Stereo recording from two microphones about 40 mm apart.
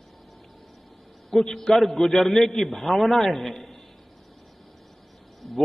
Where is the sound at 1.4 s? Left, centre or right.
Centre.